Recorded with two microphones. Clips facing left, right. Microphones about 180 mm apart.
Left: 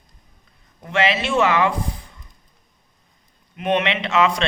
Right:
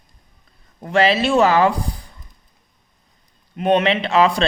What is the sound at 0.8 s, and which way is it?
A man's voice, 35° right (ahead or behind).